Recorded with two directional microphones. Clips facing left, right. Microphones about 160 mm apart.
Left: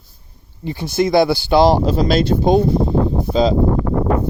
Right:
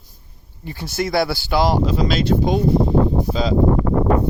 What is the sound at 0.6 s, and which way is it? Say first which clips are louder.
Speech: left 6 dB; 20° left (ahead or behind).